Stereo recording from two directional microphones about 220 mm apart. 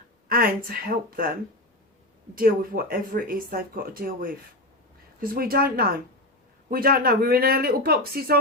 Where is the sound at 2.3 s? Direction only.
40° right (ahead or behind).